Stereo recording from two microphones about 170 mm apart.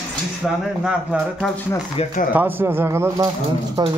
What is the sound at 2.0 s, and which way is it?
Speech, 35° left (ahead or behind).